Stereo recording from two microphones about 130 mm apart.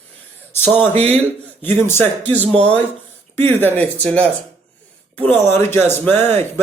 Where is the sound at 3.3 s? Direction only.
15° left (ahead or behind).